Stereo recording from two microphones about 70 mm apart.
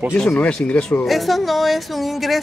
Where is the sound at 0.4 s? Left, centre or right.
Centre.